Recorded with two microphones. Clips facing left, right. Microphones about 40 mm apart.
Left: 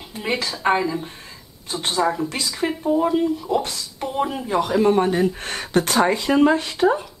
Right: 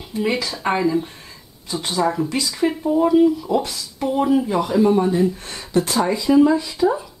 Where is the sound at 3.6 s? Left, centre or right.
Left.